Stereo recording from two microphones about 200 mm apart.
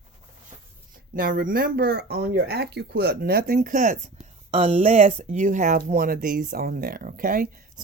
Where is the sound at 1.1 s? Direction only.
45° right (ahead or behind).